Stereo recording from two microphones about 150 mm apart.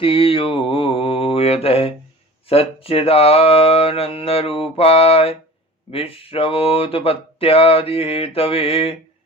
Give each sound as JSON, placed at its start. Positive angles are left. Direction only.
{"t": 0.0, "sound": "mantra", "side_deg": 35}
{"t": 2.5, "sound": "speech", "side_deg": 40}